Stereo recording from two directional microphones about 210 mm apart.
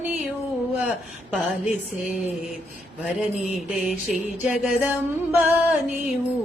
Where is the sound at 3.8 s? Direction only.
5° right (ahead or behind).